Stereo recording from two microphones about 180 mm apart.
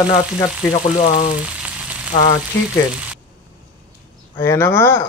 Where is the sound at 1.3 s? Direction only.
5° right (ahead or behind).